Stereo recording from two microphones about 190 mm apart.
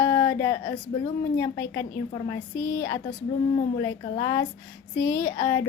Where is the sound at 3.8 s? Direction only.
20° left (ahead or behind).